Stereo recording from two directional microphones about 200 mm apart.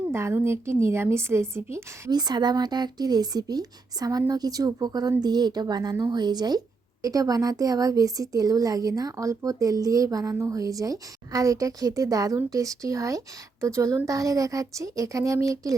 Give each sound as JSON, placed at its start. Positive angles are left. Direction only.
{"t": 0.1, "sound": "a woman's voice", "side_deg": -15}